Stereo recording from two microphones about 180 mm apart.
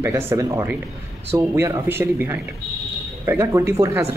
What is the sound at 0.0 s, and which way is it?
Speech, 15° right (ahead or behind).